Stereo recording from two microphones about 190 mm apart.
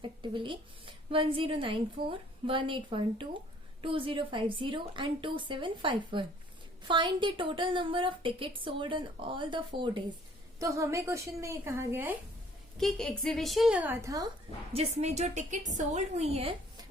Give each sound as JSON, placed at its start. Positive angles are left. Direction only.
{"t": 0.0, "sound": "a woman's voice", "side_deg": -25}
{"t": 10.6, "sound": "speech", "side_deg": -15}
{"t": 12.7, "sound": "a woman's voice", "side_deg": 0}
{"t": 14.7, "sound": "a woman's voice", "side_deg": -35}